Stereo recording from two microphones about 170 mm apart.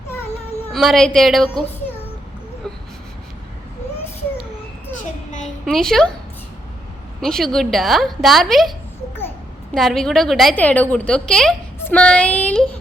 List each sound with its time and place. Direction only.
0.7 s a woman's voice: centre (ahead or behind)
4.9 s a sound: 45° left (ahead or behind)
5.6 s speech: centre (ahead or behind)
7.2 s a woman's voice: centre (ahead or behind)
9.7 s a woman's voice: centre (ahead or behind)